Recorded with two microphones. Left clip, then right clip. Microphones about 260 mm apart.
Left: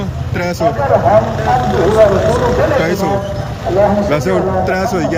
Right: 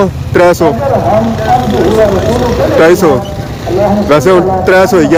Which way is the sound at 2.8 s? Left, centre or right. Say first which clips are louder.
Right 10 dB; centre.